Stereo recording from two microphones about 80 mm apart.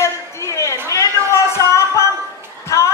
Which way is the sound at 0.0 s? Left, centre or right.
Left.